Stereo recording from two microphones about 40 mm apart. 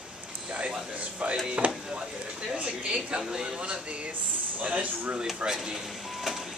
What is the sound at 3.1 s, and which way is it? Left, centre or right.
Speech, centre.